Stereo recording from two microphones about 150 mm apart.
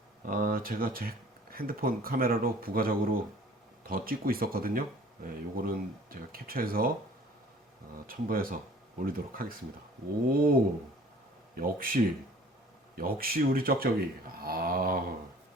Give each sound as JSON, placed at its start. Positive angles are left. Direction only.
{"t": 0.3, "sound": "speech", "side_deg": -70}
{"t": 8.0, "sound": "speech", "side_deg": -75}
{"t": 13.0, "sound": "speech", "side_deg": -75}